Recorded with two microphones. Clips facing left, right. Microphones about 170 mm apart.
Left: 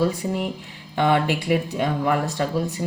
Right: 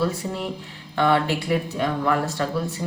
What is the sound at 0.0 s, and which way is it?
Speech, 10° left (ahead or behind).